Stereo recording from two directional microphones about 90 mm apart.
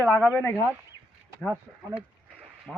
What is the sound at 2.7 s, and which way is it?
Speech, 10° left (ahead or behind).